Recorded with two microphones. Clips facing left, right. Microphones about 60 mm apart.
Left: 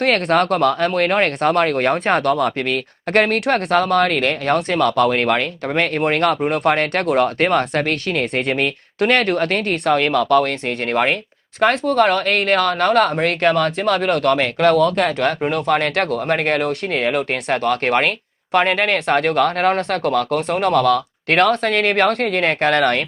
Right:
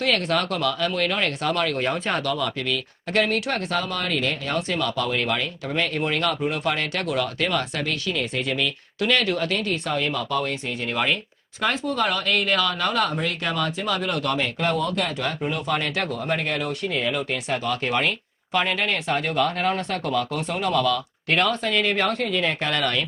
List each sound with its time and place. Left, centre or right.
0.0 s speech: left